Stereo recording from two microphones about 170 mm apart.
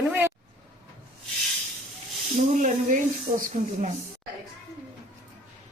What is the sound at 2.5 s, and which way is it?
Speech, 50° right (ahead or behind).